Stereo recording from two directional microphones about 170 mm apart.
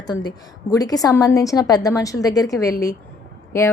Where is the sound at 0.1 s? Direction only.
25° left (ahead or behind).